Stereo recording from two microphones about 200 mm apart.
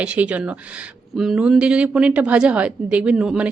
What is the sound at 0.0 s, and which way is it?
A woman's voice, 5° right (ahead or behind).